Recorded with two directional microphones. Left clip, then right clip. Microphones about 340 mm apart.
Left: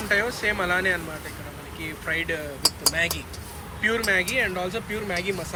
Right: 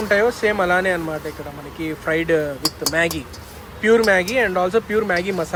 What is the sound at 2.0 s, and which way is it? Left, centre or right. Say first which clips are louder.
Speech: right 7 dB; centre.